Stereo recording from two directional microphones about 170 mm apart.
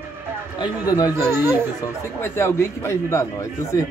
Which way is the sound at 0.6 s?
20° left (ahead or behind).